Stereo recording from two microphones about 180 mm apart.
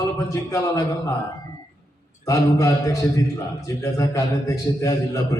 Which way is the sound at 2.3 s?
15° left (ahead or behind).